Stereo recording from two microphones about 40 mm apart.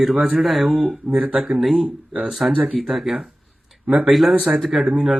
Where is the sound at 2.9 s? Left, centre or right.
Centre.